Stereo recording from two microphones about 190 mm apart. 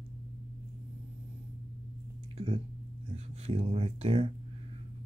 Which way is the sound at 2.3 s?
30° right (ahead or behind).